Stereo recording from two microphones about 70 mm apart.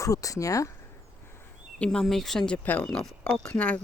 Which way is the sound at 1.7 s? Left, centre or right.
Centre.